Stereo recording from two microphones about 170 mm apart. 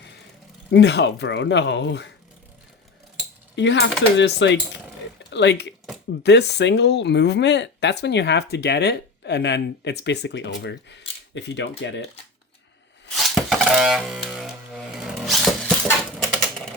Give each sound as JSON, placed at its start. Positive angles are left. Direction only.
{"t": 0.7, "sound": "speech", "side_deg": 80}
{"t": 3.5, "sound": "speech", "side_deg": 90}
{"t": 13.1, "sound": "music", "side_deg": 0}